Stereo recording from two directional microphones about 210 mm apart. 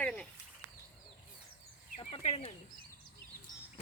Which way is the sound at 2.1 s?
30° left (ahead or behind).